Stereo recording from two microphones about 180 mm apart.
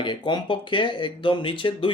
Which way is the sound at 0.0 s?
25° left (ahead or behind).